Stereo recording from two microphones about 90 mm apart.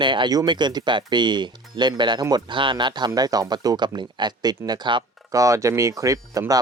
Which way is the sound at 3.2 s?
45° right (ahead or behind).